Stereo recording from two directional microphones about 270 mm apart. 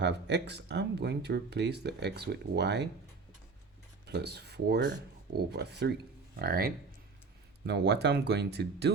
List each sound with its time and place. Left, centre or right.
0.0 s speech: right
4.0 s speech: right